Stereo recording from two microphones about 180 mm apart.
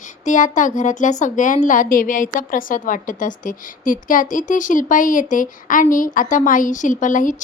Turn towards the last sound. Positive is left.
turn(degrees=45)  # may be behind; listen again after turning